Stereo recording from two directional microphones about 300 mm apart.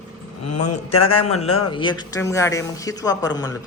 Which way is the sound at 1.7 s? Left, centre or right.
Centre.